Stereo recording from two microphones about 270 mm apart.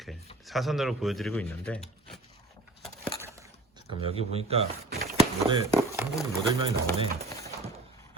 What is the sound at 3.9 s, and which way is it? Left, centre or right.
Speech, right.